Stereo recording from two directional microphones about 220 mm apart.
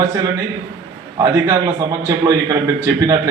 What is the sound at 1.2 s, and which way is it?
A man's voice, 15° right (ahead or behind).